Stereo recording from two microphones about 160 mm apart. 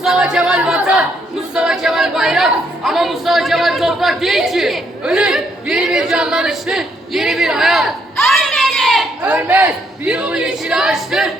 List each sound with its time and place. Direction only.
0.0 s speech: 5° right (ahead or behind)